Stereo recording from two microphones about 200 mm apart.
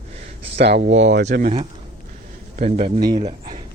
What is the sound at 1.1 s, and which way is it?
Speech, 60° right (ahead or behind).